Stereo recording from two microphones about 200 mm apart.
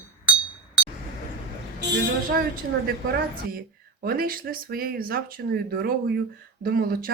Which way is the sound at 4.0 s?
50° right (ahead or behind).